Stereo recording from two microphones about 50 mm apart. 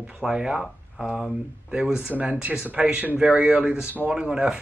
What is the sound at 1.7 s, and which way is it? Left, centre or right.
Speech, right.